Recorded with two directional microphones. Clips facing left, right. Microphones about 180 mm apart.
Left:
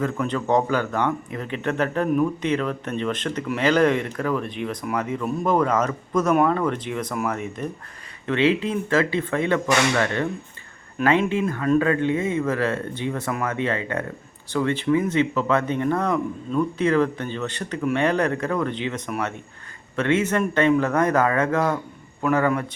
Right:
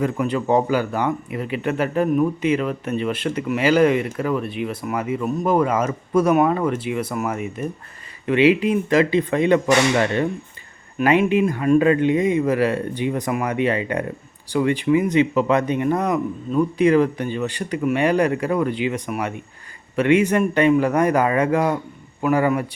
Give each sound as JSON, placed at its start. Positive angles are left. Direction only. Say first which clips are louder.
{"t": 0.0, "sound": "speech", "louder": "right 3 dB", "side_deg": -10}